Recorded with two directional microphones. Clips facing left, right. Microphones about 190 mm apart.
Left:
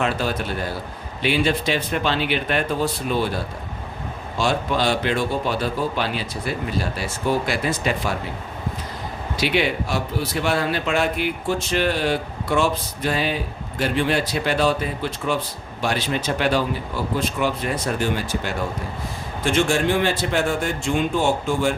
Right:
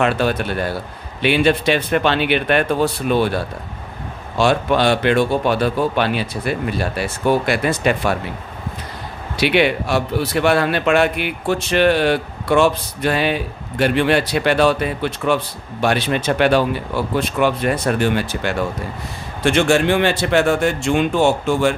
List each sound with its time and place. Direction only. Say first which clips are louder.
0.0 s speech: right 5 dB; 65° right (ahead or behind)
4.4 s speech: right 6 dB; 65° right (ahead or behind)
9.4 s a man's voice: right 5 dB; 65° right (ahead or behind)